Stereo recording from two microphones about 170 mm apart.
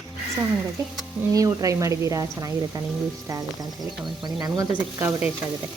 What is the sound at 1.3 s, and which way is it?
A woman's voice, 20° right (ahead or behind).